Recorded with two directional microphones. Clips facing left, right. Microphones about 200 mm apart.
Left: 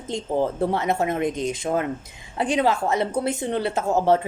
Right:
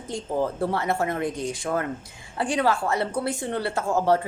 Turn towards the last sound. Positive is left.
turn(degrees=20)  # may be behind; listen again after turning